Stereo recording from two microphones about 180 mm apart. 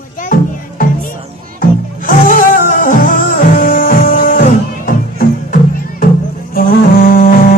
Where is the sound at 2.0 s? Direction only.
50° left (ahead or behind).